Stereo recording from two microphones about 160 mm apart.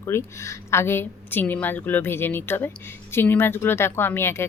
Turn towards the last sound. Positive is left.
turn(degrees=15)  # may be behind; listen again after turning